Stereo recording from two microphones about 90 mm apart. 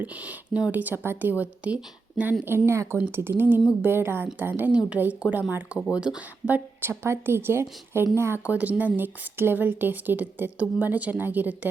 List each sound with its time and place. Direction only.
0.0 s speech: 15° right (ahead or behind)
2.4 s speech: 25° right (ahead or behind)
8.4 s speech: 15° right (ahead or behind)